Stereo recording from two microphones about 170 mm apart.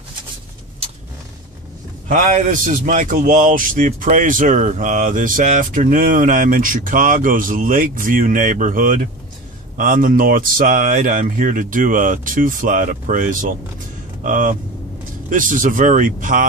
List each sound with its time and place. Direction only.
2.0 s a man's voice: 50° right (ahead or behind)